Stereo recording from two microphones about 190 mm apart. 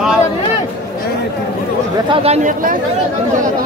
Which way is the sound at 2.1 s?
35° right (ahead or behind).